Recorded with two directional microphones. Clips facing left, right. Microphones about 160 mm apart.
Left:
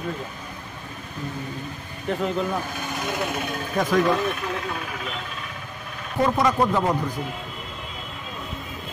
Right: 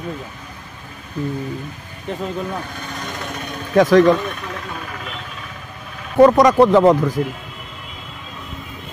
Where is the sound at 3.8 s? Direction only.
90° right.